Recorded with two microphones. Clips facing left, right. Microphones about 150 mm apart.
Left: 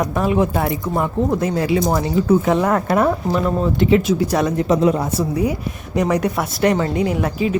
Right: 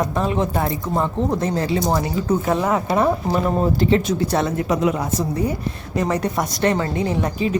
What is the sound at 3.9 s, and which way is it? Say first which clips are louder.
Speech: left 3 dB; 10° left (ahead or behind).